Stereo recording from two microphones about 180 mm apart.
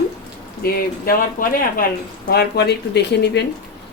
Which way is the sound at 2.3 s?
65° left (ahead or behind).